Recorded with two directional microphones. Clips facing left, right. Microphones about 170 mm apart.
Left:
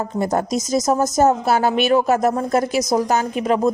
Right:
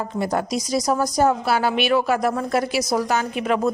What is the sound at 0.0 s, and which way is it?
A woman's voice, 45° left (ahead or behind).